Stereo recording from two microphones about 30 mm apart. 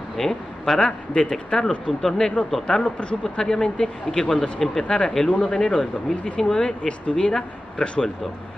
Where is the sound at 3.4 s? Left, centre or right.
Left.